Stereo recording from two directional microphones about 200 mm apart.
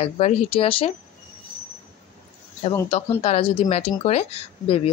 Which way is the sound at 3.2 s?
30° left (ahead or behind).